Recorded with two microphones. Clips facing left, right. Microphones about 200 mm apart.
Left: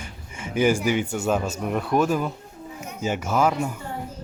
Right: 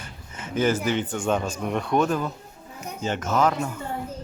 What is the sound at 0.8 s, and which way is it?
Speech, 10° left (ahead or behind).